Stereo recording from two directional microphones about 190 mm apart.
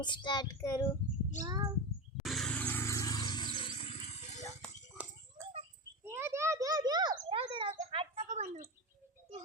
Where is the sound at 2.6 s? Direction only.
15° left (ahead or behind).